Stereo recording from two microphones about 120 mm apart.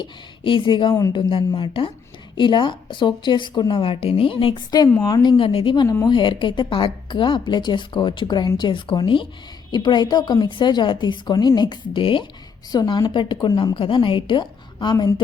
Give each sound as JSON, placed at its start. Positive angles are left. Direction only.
{"t": 0.0, "sound": "a woman's voice", "side_deg": 45}
{"t": 4.9, "sound": "a woman's voice", "side_deg": 25}
{"t": 5.4, "sound": "a woman's voice", "side_deg": 45}
{"t": 5.8, "sound": "a woman's voice", "side_deg": 25}
{"t": 6.1, "sound": "a woman's voice", "side_deg": 40}
{"t": 12.7, "sound": "a woman's voice", "side_deg": 30}